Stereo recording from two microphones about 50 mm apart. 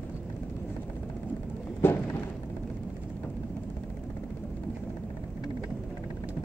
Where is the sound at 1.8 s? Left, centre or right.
Left.